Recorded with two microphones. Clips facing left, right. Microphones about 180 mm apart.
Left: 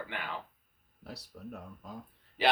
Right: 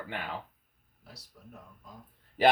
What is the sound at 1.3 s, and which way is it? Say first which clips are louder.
Speech: left 11 dB; 70° left (ahead or behind).